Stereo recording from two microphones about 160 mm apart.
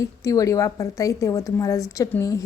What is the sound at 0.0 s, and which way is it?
Speech, 20° left (ahead or behind).